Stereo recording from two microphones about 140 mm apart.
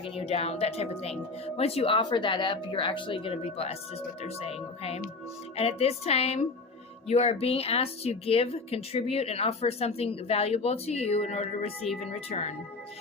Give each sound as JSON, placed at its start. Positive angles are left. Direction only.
{"t": 0.0, "sound": "speech", "side_deg": 45}